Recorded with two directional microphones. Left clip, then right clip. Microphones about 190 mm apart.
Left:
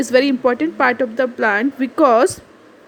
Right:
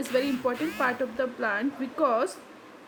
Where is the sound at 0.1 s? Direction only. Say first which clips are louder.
Left 12 dB; 40° left (ahead or behind).